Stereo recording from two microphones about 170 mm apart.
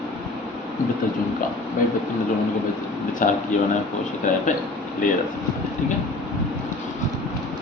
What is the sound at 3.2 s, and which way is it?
Speech, 50° left (ahead or behind).